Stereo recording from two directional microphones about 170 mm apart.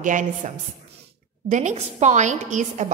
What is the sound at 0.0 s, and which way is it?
Speech, 50° right (ahead or behind).